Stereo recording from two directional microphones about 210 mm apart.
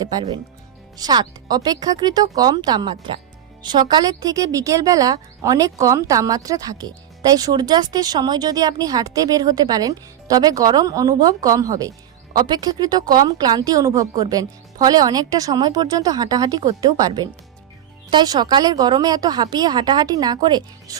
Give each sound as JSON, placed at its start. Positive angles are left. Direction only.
{"t": 0.0, "sound": "speech", "side_deg": -20}